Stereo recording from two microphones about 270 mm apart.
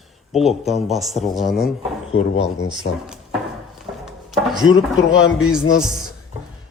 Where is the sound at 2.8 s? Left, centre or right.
Left.